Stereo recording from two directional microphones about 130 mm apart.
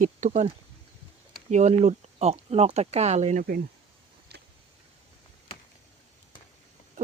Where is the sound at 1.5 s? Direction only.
65° right (ahead or behind).